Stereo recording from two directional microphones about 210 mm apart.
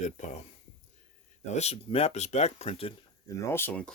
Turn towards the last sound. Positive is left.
turn(degrees=10)  # may be behind; listen again after turning